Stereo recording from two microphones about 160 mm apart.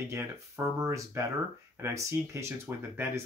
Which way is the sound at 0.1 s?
20° right (ahead or behind).